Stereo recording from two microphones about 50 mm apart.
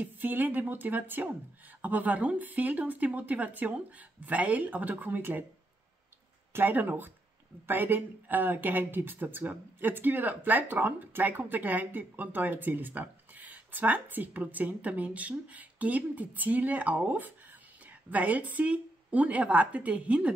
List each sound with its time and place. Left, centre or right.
0.0 s speech: right
6.5 s a woman's voice: right